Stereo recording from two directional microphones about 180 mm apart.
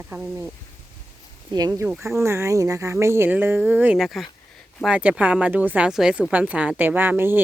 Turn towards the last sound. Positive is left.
turn(degrees=-10)  # may be behind; listen again after turning